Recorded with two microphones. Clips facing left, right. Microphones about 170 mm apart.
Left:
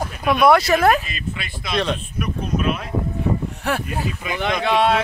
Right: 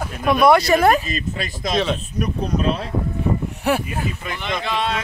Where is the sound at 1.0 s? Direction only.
40° right (ahead or behind).